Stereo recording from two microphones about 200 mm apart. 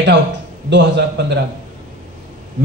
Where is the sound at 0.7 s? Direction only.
60° right (ahead or behind).